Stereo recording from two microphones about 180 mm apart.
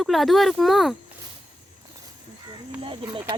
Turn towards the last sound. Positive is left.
turn(degrees=-25)  # may be behind; listen again after turning